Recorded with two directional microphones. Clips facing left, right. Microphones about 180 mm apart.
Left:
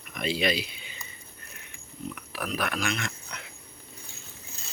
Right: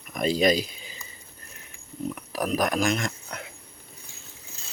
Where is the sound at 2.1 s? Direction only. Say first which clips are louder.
Right 7 dB; 40° right (ahead or behind).